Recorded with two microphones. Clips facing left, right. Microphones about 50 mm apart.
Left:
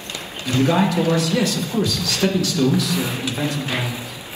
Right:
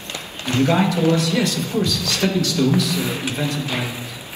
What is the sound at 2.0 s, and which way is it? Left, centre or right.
Speech, right.